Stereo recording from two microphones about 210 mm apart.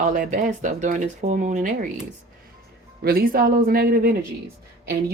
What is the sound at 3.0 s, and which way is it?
Speech, 45° right (ahead or behind).